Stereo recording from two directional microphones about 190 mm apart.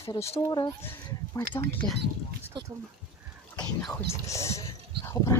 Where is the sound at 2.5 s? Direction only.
25° right (ahead or behind).